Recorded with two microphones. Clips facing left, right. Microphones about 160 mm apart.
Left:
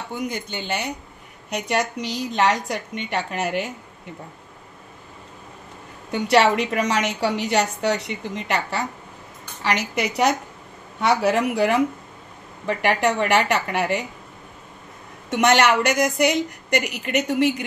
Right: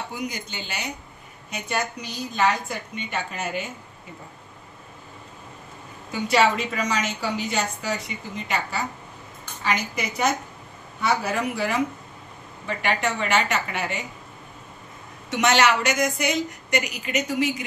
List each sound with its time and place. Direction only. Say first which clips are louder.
0.3 s a woman's voice: left 7 dB; 55° left (ahead or behind)
1.5 s a woman's voice: left 5 dB; 75° left (ahead or behind)
6.1 s a woman's voice: left 3 dB; 70° left (ahead or behind)
15.2 s a woman's voice: left 3 dB; 55° left (ahead or behind)